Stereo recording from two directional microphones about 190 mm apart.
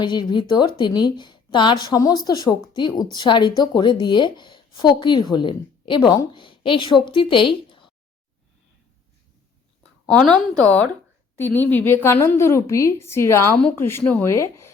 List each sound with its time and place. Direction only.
0.0 s a woman's voice: 25° left (ahead or behind)
10.1 s a woman's voice: 5° left (ahead or behind)